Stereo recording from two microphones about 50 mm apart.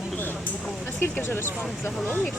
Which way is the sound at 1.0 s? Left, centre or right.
Left.